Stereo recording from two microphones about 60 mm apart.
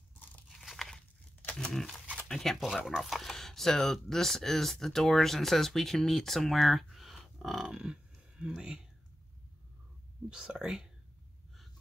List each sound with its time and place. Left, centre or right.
0.1 s crunch: left
0.5 s crunch: centre
1.7 s speech: centre
2.6 s speech: centre
10.3 s speech: centre